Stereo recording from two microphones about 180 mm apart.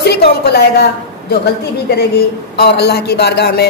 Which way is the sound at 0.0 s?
65° left (ahead or behind).